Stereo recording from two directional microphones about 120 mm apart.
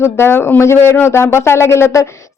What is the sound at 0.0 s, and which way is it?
Speech, 20° left (ahead or behind).